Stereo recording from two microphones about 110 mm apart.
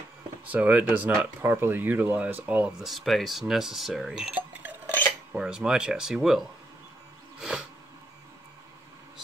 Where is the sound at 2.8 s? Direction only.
Centre (ahead or behind).